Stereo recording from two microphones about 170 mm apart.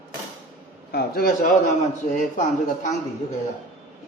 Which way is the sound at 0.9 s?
65° left (ahead or behind).